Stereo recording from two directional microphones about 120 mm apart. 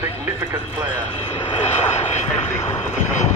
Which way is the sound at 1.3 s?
50° left (ahead or behind).